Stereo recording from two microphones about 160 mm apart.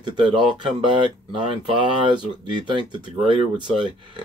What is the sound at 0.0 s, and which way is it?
Speech, 30° right (ahead or behind).